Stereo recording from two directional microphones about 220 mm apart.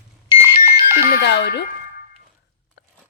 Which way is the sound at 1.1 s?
50° left (ahead or behind).